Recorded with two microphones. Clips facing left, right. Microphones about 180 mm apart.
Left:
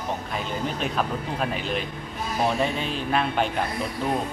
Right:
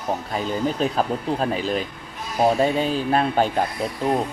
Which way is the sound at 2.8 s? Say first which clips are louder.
Right 5 dB; 40° right (ahead or behind).